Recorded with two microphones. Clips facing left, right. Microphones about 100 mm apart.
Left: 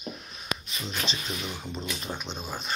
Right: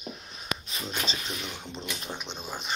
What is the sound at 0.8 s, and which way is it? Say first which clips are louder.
Speech: right 1 dB; 35° right (ahead or behind).